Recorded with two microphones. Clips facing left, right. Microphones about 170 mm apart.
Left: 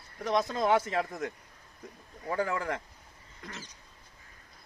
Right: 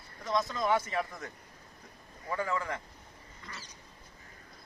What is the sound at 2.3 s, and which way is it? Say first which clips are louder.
Speech: left 2 dB; 50° left (ahead or behind).